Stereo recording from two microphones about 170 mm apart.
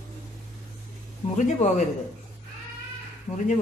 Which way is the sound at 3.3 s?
20° left (ahead or behind).